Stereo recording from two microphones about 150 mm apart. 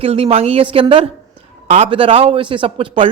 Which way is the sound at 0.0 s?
40° right (ahead or behind).